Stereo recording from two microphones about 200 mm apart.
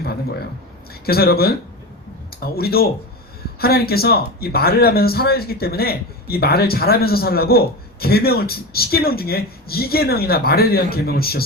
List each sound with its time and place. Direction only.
1.0 s a man's voice: 50° left (ahead or behind)